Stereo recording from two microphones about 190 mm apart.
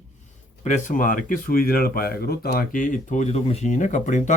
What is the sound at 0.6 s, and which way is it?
Speech, 40° left (ahead or behind).